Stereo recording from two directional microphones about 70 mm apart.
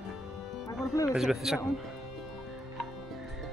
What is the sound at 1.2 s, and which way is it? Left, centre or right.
Speech, centre.